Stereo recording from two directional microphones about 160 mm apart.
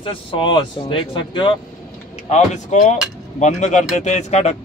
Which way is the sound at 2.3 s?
45° left (ahead or behind).